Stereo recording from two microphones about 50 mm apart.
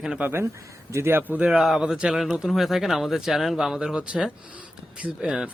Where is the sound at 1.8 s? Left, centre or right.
Centre.